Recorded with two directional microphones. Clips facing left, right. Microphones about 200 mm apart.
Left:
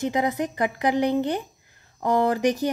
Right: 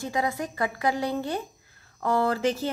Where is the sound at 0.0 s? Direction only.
20° left (ahead or behind).